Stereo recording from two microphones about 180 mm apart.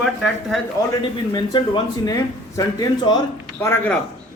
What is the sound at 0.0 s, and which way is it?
Speech, centre (ahead or behind).